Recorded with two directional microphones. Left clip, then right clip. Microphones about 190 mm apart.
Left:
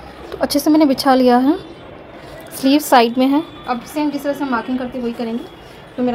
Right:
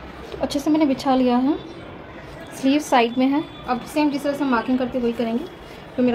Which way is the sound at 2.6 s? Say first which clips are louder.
Left 6 dB; 40° left (ahead or behind).